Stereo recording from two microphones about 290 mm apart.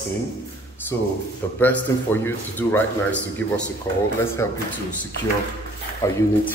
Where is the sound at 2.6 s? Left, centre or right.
Centre.